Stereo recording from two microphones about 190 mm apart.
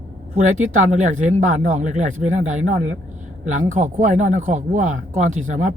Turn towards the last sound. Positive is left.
turn(degrees=-40)  # may be behind; listen again after turning